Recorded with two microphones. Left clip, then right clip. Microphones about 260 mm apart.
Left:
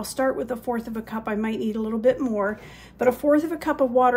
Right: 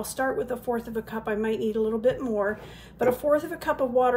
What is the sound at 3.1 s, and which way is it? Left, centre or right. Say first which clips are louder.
Speech: left 4 dB; left.